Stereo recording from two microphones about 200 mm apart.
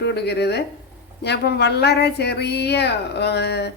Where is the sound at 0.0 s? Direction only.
55° left (ahead or behind).